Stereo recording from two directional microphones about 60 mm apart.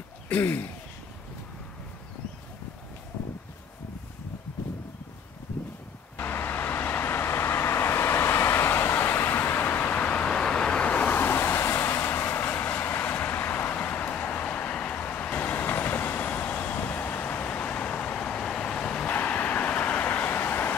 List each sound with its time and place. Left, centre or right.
0.4 s a sound: left
6.1 s vehicle: left; by 19.0 s centre
19.0 s vehicle: left
20.2 s vehicle: left